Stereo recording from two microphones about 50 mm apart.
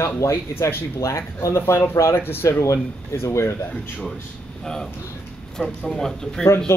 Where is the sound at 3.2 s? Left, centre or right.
Left.